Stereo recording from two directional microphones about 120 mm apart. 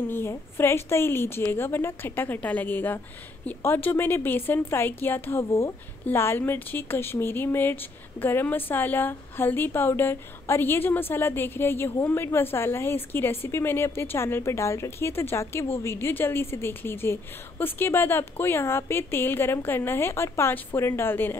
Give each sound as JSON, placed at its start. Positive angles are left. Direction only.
{"t": 0.1, "sound": "a woman's voice", "side_deg": 20}